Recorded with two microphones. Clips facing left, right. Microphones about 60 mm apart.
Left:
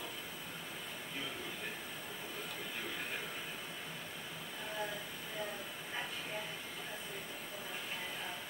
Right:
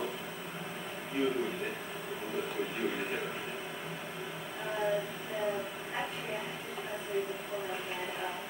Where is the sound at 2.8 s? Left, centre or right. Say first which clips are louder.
Right 8 dB; centre.